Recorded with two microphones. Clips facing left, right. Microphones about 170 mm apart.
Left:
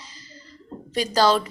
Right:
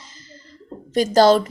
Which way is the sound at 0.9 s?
50° right (ahead or behind).